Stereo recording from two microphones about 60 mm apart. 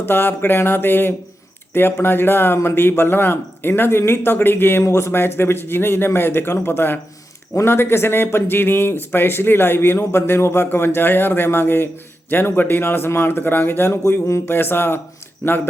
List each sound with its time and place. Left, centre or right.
0.0 s speech: left
4.9 s speech: left
14.3 s a sound: left
14.5 s speech: left